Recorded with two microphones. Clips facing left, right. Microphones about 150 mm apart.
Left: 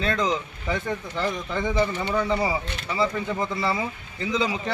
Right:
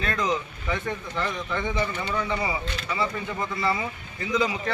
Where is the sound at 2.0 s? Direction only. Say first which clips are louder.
Left 4 dB; 30° left (ahead or behind).